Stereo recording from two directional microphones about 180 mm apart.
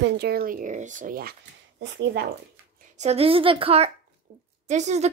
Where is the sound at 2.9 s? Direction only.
35° right (ahead or behind).